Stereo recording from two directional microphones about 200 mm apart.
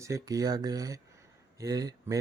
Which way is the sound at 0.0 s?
15° right (ahead or behind).